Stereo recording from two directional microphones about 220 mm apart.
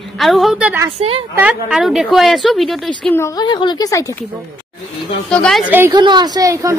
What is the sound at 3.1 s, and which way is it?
Speech, 15° left (ahead or behind).